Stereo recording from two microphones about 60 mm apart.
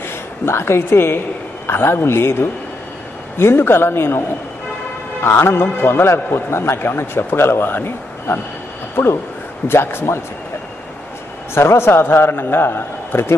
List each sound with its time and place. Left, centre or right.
0.0 s a man's voice: left
5.4 s a man's voice: left
11.5 s a man's voice: left